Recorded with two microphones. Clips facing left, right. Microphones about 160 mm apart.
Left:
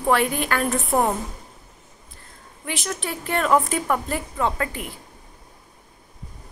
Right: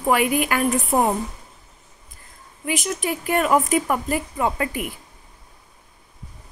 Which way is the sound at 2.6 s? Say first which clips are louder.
Right 4 dB; 5° right (ahead or behind).